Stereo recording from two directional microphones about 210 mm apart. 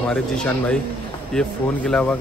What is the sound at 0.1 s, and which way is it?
Speech, 5° left (ahead or behind).